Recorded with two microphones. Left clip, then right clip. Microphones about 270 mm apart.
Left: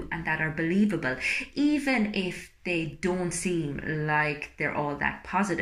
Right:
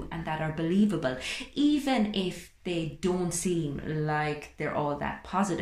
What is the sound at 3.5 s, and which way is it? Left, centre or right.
Speech, centre.